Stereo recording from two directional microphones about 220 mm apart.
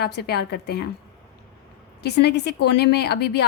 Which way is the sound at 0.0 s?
45° left (ahead or behind).